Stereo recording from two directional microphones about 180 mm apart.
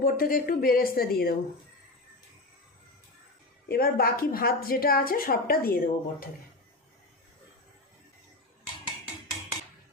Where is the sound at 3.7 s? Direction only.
55° left (ahead or behind).